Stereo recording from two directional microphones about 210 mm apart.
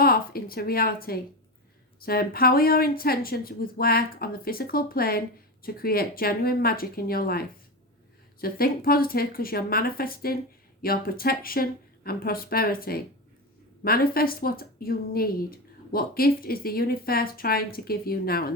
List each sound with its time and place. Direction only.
0.0 s a woman's voice: 45° left (ahead or behind)